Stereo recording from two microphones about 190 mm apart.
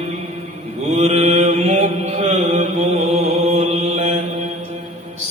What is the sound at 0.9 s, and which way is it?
Mantra, 35° right (ahead or behind).